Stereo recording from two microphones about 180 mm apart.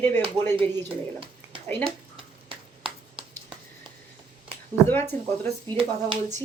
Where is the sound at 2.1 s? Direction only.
30° right (ahead or behind).